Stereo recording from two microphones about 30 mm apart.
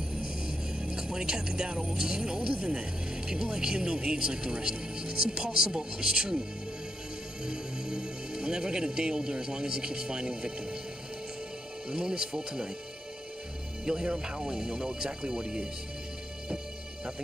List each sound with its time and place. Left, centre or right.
0.2 s music: right
1.8 s speech: right
7.4 s speech: right
11.9 s speech: right
13.8 s speech: right